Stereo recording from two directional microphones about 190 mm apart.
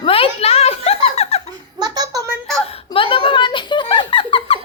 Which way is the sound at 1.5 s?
20° right (ahead or behind).